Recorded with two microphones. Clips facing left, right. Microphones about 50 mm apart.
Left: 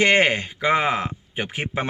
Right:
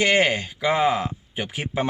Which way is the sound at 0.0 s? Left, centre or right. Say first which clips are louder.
Left 2 dB; left.